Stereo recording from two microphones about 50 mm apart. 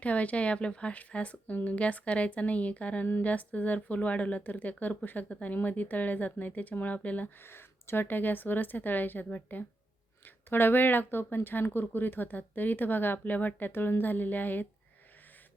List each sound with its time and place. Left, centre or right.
0.0 s speech: left
7.3 s speech: left